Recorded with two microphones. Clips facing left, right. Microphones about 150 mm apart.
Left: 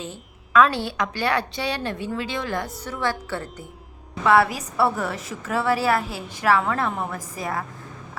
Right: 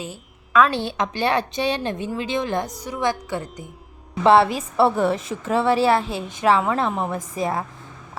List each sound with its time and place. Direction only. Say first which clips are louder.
0.0 s a woman's voice: right 1 dB; 5° right (ahead or behind)
0.7 s a woman's voice: right 2 dB; 20° right (ahead or behind)
4.2 s a woman's voice: right 3 dB; 25° right (ahead or behind)